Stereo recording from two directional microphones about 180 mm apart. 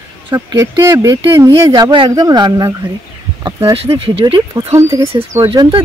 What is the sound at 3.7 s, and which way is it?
Speech, 30° right (ahead or behind).